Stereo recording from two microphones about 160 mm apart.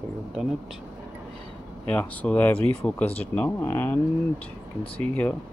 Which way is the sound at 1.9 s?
10° left (ahead or behind).